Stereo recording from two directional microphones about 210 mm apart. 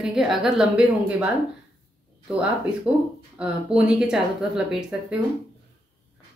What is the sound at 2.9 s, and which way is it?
Speech, 25° right (ahead or behind).